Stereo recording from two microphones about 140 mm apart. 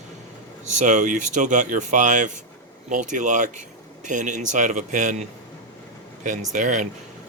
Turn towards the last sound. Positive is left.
turn(degrees=-60)  # may be behind; listen again after turning